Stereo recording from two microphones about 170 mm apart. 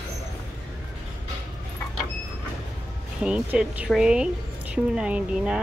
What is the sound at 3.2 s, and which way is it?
Speech, 5° right (ahead or behind).